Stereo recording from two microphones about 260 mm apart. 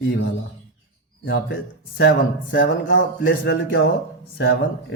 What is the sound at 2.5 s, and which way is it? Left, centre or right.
Speech, left.